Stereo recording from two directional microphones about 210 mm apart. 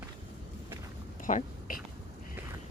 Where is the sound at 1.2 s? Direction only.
35° left (ahead or behind).